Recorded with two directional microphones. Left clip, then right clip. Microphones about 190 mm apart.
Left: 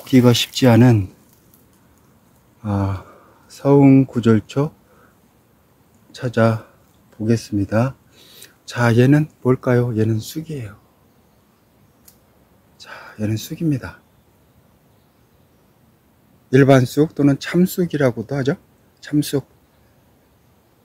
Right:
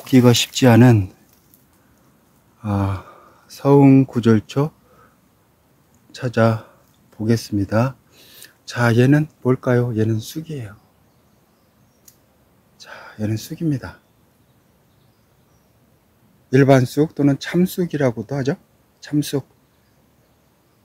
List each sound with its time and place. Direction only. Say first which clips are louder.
0.0 s speech: even; 15° right (ahead or behind)
2.6 s speech: even; 10° right (ahead or behind)
6.1 s speech: even; 5° right (ahead or behind)
12.7 s speech: left 1 dB; centre (ahead or behind)
16.4 s speech: left 1 dB; centre (ahead or behind)